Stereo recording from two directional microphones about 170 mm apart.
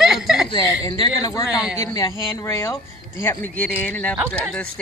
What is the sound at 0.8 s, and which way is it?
Speech, 25° left (ahead or behind).